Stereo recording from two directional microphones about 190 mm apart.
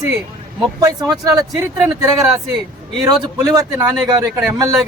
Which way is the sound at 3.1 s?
20° right (ahead or behind).